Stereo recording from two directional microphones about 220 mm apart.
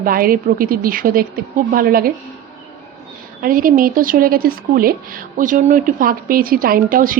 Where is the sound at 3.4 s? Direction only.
40° right (ahead or behind).